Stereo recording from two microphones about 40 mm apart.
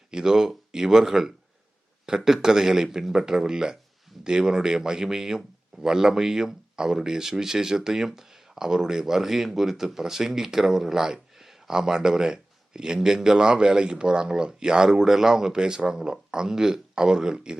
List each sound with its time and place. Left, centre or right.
0.1 s speech: centre